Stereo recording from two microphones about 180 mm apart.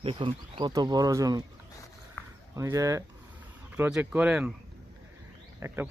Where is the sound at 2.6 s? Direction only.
15° right (ahead or behind).